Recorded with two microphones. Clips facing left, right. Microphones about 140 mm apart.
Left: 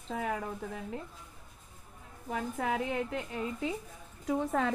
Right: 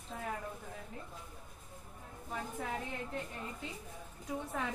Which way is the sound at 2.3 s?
90° left.